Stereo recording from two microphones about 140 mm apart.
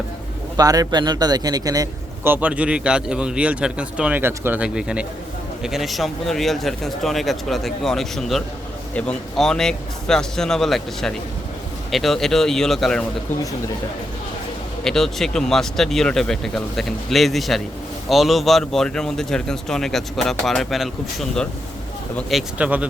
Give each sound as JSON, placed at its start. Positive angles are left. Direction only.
{"t": 0.5, "sound": "a man's voice", "side_deg": -25}
{"t": 2.3, "sound": "speech", "side_deg": -10}
{"t": 14.8, "sound": "speech", "side_deg": 5}